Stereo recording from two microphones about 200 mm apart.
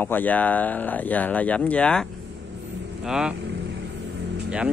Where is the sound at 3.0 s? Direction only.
5° right (ahead or behind).